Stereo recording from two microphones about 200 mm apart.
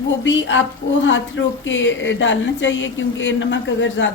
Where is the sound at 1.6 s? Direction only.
65° left (ahead or behind).